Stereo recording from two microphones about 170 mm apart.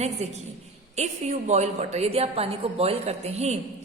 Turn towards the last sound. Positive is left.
turn(degrees=-40)  # may be behind; listen again after turning